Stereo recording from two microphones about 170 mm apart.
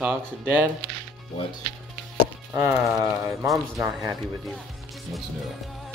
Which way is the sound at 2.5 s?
15° right (ahead or behind).